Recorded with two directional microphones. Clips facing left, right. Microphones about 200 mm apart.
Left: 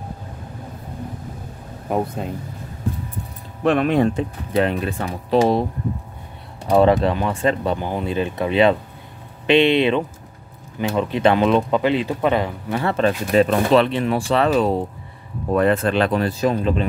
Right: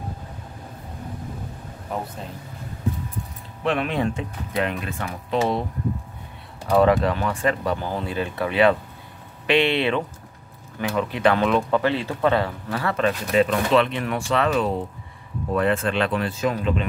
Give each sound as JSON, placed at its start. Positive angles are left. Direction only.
{"t": 3.6, "sound": "speech", "side_deg": 45}
{"t": 6.7, "sound": "speech", "side_deg": 20}